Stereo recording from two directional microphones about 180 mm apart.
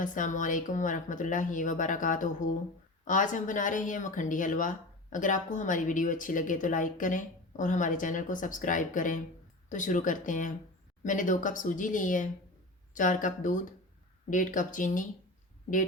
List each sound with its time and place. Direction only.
0.0 s speech: 45° left (ahead or behind)